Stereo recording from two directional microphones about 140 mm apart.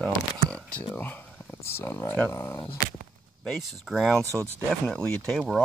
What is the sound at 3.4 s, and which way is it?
Speech, centre (ahead or behind).